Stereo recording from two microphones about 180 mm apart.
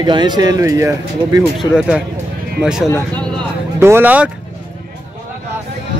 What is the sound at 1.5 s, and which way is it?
Speech, 5° right (ahead or behind).